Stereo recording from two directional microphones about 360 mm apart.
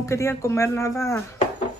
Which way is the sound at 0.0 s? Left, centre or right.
Centre.